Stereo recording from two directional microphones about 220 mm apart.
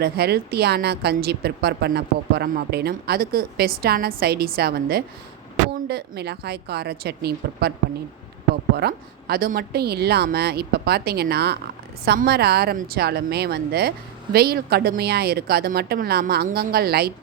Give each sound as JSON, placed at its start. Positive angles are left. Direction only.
{"t": 0.0, "sound": "speech", "side_deg": -45}
{"t": 8.7, "sound": "speech", "side_deg": -45}